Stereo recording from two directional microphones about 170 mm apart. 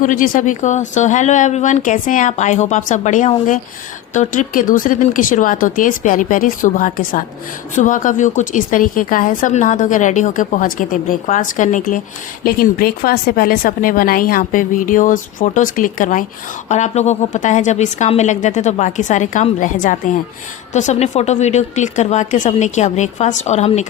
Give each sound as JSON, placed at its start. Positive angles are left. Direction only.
{"t": 0.0, "sound": "a woman's voice", "side_deg": 50}